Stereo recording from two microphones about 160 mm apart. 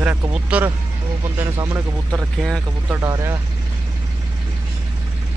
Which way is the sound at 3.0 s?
20° right (ahead or behind).